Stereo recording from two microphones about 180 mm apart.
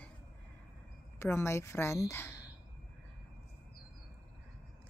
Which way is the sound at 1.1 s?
15° left (ahead or behind).